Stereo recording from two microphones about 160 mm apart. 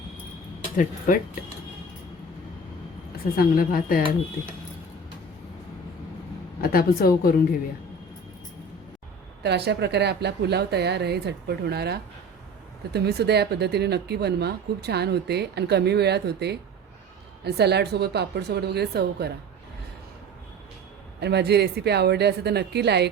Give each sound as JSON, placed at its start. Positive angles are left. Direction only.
{"t": 0.8, "sound": "a woman's voice", "side_deg": 55}
{"t": 3.3, "sound": "a woman's voice", "side_deg": 65}
{"t": 6.6, "sound": "a woman's voice", "side_deg": 65}
{"t": 9.4, "sound": "speech", "side_deg": -90}
{"t": 21.2, "sound": "speech", "side_deg": -90}